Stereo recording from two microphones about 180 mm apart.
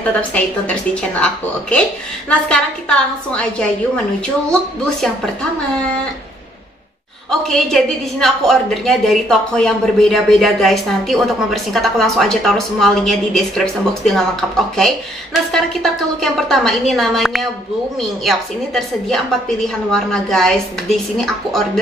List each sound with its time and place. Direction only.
0.3 s a woman's voice: 5° left (ahead or behind)
7.2 s a woman's voice: centre (ahead or behind)
15.5 s a woman's voice: centre (ahead or behind)